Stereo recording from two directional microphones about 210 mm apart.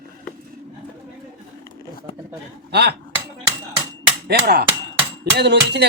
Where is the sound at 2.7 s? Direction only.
50° right (ahead or behind).